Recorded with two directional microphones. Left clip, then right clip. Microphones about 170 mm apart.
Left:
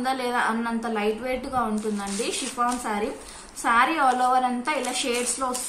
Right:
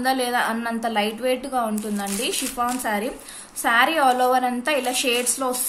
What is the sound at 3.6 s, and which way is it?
A woman's voice, 45° right (ahead or behind).